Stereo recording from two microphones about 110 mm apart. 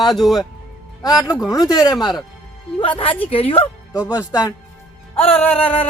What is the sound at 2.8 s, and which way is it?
Speech, 55° left (ahead or behind).